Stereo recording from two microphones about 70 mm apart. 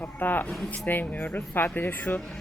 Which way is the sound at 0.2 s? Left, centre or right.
Left.